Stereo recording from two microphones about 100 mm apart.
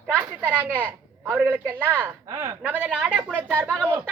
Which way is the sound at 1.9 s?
20° right (ahead or behind).